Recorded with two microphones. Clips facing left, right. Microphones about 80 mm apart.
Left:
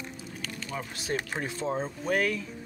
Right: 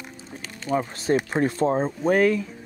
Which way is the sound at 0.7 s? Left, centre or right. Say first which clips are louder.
Right 11 dB; right.